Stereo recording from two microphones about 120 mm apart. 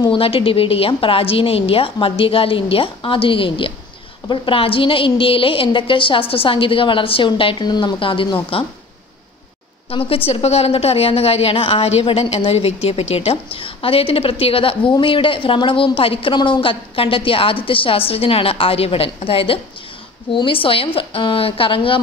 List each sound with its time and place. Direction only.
0.1 s a woman's voice: 50° left (ahead or behind)
9.8 s a woman's voice: 50° left (ahead or behind)